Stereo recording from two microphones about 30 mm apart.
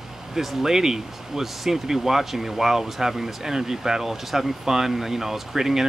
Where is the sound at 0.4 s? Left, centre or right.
Centre.